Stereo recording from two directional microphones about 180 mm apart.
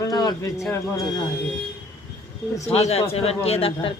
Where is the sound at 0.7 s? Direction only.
15° left (ahead or behind).